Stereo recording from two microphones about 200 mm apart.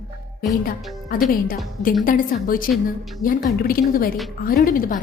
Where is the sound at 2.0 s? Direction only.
45° left (ahead or behind).